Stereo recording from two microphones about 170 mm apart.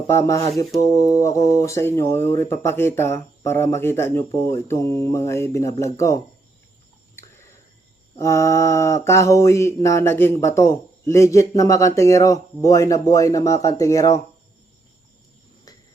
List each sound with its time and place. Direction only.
0.1 s mantra: 15° left (ahead or behind)
8.1 s mantra: 15° left (ahead or behind)